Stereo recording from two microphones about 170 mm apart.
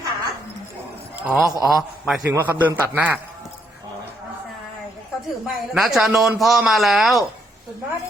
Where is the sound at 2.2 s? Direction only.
15° right (ahead or behind).